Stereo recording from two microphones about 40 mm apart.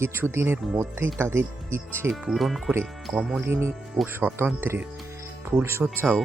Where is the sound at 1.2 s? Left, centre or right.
Right.